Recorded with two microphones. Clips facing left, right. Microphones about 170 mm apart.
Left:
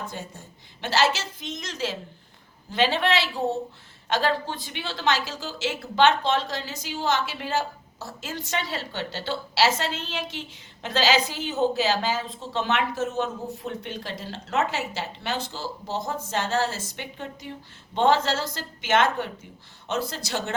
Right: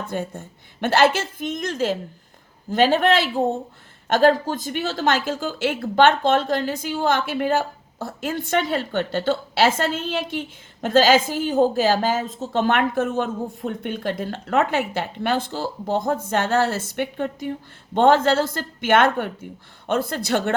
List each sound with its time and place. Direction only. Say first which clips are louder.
0.1 s a woman's voice: right 10 dB; 55° right (ahead or behind)